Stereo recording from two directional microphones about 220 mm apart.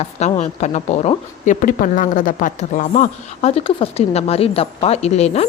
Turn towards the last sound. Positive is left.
turn(degrees=30)  # may be behind; listen again after turning